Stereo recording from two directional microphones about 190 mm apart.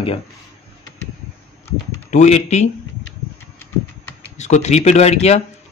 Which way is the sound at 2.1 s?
40° left (ahead or behind).